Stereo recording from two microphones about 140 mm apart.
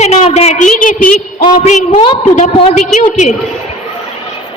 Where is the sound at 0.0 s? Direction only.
50° left (ahead or behind); by 1.5 s 70° left (ahead or behind).